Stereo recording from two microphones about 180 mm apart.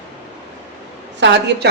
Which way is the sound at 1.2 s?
85° right.